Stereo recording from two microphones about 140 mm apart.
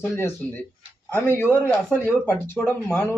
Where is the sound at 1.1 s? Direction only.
15° left (ahead or behind).